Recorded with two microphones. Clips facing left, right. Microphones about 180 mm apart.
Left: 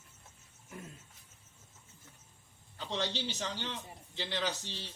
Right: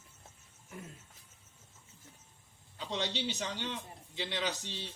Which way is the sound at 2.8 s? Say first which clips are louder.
Even; centre (ahead or behind).